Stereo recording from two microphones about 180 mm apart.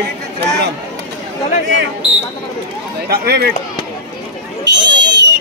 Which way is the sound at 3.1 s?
60° right (ahead or behind).